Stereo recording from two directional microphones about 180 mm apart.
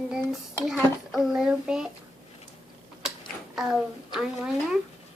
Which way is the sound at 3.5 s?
Centre (ahead or behind).